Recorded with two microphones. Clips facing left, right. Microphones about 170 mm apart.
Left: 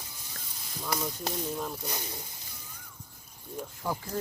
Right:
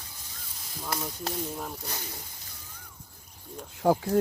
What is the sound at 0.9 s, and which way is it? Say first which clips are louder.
Speech: left 1 dB; centre (ahead or behind).